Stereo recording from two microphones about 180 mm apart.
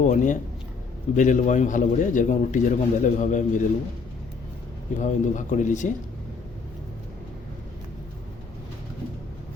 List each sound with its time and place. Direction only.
0.0 s a man's voice: 45° left (ahead or behind)
4.9 s a man's voice: 45° left (ahead or behind)